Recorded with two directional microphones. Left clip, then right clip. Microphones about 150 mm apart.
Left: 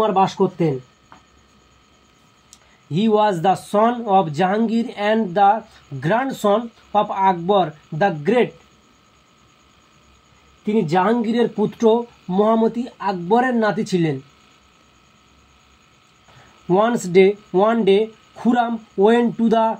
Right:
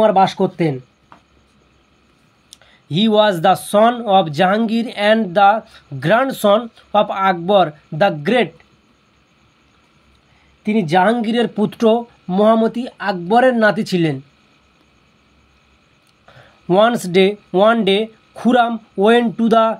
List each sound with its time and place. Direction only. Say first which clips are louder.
0.0 s speech: right 4 dB; 80° right
2.5 s speech: right 4 dB; 75° right (ahead or behind)
10.6 s speech: right 3 dB; 90° right; by 14.1 s 70° right (ahead or behind)
16.6 s speech: right 4 dB; 70° right (ahead or behind)